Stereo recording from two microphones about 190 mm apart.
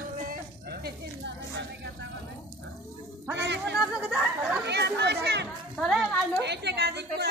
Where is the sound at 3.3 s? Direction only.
70° right (ahead or behind).